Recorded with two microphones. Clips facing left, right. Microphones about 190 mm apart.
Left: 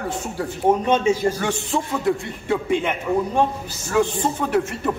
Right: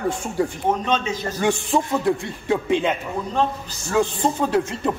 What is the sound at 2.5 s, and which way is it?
Speech, 20° right (ahead or behind).